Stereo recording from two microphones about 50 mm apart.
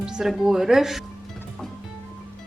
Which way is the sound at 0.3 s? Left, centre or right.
Centre.